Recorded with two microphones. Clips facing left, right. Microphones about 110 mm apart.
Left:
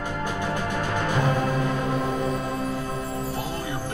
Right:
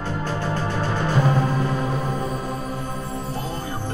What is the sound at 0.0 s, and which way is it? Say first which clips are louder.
Music: right 2 dB; 15° left (ahead or behind).